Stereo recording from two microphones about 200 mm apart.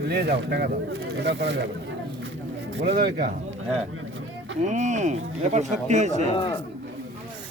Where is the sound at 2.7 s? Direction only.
55° right (ahead or behind).